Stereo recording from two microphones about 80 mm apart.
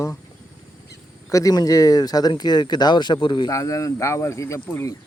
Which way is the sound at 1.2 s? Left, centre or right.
Left.